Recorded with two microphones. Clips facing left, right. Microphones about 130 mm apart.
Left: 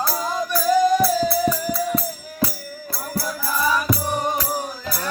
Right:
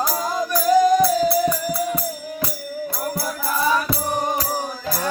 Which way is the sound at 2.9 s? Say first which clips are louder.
Left 2 dB; 20° right (ahead or behind).